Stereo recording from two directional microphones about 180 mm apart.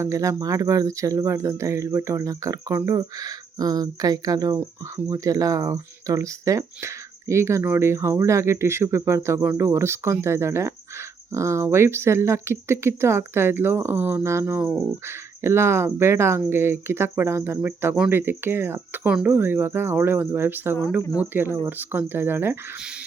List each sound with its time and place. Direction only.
0.0 s speech: 15° right (ahead or behind)